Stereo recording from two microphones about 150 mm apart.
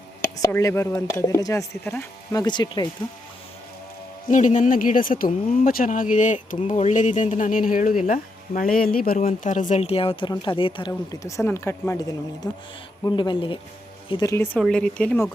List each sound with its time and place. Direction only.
0.3 s speech: 20° left (ahead or behind)
2.3 s speech: 30° left (ahead or behind)
4.3 s speech: 55° left (ahead or behind); by 13.6 s 35° left (ahead or behind)
14.1 s speech: 20° left (ahead or behind)
14.6 s speech: 5° left (ahead or behind)